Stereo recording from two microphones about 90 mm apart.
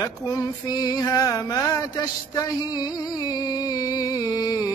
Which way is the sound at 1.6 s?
40° left (ahead or behind).